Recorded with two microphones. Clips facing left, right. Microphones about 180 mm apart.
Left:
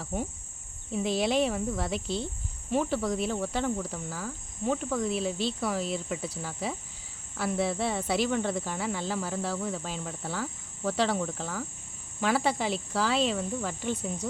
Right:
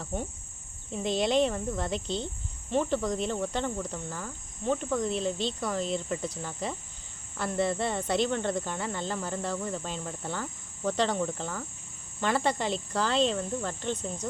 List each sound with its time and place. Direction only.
0.0 s speech: 5° left (ahead or behind)